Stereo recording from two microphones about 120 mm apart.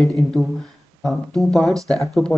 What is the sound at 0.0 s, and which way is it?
Speech, centre (ahead or behind).